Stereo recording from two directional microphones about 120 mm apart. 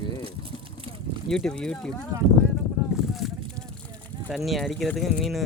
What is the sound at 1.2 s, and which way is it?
Speech, 5° left (ahead or behind).